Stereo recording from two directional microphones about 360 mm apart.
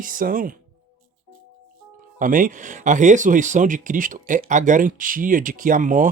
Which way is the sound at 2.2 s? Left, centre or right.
Right.